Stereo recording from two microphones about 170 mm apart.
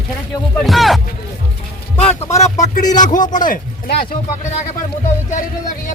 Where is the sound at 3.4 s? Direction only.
65° left (ahead or behind).